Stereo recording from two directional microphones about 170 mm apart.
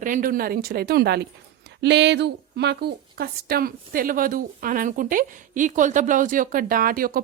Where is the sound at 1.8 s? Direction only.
90° right.